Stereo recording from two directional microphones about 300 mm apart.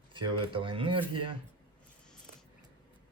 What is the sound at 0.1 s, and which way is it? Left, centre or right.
Speech, centre.